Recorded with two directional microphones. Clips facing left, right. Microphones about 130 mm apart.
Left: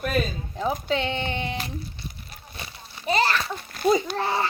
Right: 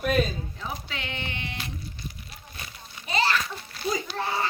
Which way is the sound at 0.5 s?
40° left (ahead or behind).